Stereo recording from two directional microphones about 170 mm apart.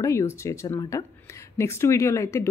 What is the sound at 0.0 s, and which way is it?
Speech, 15° left (ahead or behind).